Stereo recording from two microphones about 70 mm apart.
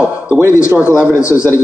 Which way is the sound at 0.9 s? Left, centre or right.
Left.